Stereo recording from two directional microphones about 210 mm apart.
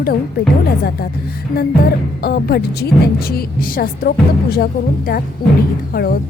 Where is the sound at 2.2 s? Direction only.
50° left (ahead or behind).